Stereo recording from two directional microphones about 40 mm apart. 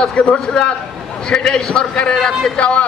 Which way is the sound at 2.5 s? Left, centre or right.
Left.